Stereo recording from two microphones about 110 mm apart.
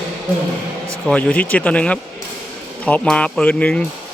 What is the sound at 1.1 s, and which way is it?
Speech, 15° left (ahead or behind).